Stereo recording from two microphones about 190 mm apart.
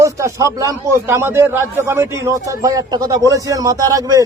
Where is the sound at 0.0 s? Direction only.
15° right (ahead or behind).